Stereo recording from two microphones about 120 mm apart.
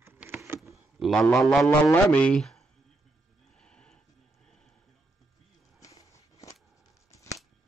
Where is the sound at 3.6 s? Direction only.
5° left (ahead or behind).